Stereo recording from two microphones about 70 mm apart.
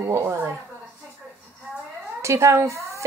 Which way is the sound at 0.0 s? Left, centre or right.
Right.